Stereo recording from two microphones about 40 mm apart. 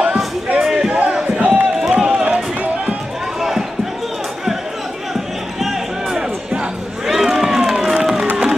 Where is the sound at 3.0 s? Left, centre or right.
Centre.